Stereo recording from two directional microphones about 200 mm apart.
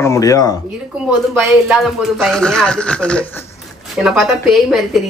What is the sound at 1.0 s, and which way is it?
Speech, 5° right (ahead or behind).